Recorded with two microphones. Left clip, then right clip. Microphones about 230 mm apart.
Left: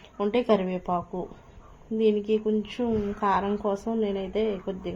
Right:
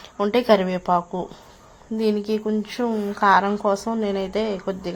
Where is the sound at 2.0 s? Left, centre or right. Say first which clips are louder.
Right 1 dB; right.